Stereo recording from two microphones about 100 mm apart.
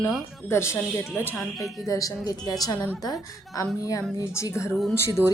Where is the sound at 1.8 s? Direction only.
35° left (ahead or behind).